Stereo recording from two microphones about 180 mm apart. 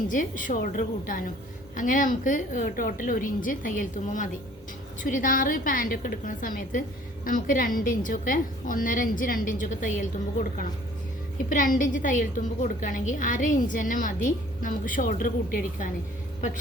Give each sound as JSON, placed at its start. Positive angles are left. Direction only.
{"t": 0.1, "sound": "a woman's voice", "side_deg": 45}
{"t": 11.4, "sound": "a woman's voice", "side_deg": 50}